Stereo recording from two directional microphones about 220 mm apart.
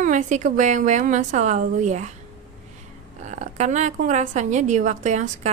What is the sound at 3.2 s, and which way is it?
A woman's voice, 30° right (ahead or behind).